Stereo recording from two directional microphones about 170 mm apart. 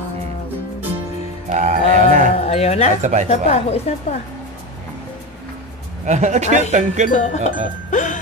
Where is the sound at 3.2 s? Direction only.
40° left (ahead or behind).